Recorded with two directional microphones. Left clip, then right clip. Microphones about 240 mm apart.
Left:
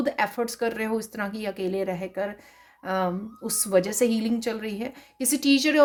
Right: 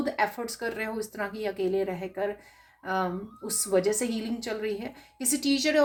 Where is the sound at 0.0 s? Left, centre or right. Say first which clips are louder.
Left 3 dB; left.